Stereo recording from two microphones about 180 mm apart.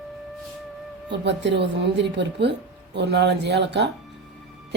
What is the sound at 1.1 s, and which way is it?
Speech, 75° right (ahead or behind).